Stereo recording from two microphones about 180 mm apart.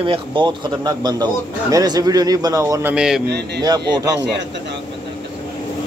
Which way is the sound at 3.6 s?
20° right (ahead or behind).